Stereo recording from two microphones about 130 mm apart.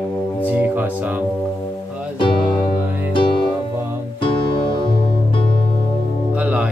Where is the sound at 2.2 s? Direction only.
40° left (ahead or behind).